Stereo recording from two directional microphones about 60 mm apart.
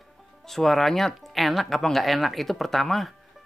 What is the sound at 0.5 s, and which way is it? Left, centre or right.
Speech, centre.